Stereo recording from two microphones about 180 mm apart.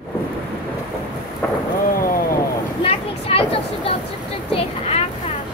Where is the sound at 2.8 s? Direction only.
30° left (ahead or behind).